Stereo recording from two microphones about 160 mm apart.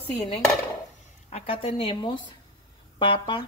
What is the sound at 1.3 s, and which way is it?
Speech, 40° left (ahead or behind).